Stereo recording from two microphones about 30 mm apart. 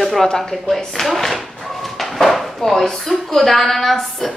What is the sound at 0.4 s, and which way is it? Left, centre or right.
Speech, centre.